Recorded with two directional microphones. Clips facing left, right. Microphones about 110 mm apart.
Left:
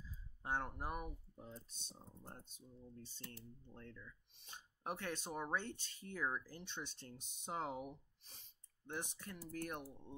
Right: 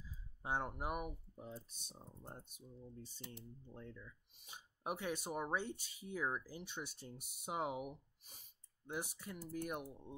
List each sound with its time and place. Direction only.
0.4 s speech: 15° right (ahead or behind)